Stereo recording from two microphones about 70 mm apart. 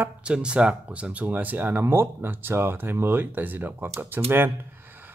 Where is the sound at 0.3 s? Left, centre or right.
Centre.